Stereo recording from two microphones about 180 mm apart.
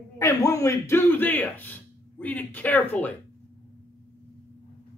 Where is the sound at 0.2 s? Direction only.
20° left (ahead or behind).